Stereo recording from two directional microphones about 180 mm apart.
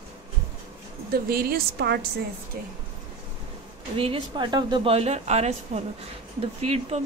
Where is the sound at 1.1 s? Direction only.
55° right (ahead or behind).